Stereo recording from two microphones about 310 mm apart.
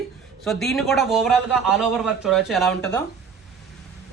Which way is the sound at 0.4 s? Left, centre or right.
Centre.